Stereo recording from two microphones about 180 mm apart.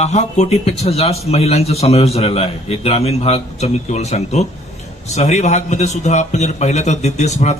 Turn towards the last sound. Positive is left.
turn(degrees=40)  # may be behind; listen again after turning